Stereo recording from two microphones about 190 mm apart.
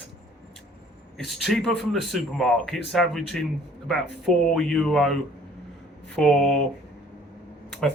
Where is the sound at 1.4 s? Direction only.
Centre (ahead or behind).